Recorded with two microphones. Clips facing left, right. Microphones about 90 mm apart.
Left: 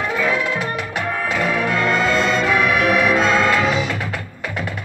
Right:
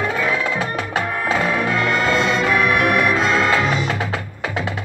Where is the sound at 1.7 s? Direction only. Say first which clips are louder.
Left 2 dB; 5° right (ahead or behind).